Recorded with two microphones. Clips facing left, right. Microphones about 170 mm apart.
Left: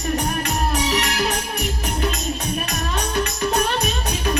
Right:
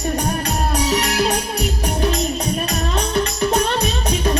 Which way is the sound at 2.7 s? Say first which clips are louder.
Right 4 dB; 20° right (ahead or behind).